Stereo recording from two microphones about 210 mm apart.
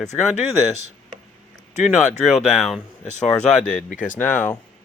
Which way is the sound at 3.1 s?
35° left (ahead or behind).